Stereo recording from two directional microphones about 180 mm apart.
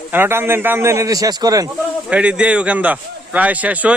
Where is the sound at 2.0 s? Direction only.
5° right (ahead or behind).